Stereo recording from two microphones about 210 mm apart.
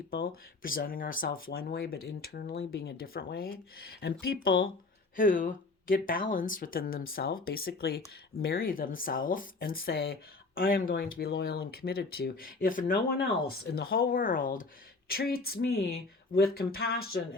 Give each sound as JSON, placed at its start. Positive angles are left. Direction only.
{"t": 0.1, "sound": "speech", "side_deg": 45}